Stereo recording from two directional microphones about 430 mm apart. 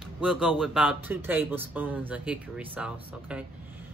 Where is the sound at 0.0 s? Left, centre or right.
Centre.